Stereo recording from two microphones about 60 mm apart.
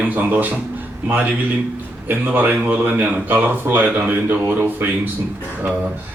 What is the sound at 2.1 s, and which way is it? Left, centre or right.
Speech, right.